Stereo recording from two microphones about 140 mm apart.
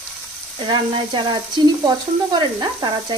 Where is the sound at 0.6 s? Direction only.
35° right (ahead or behind).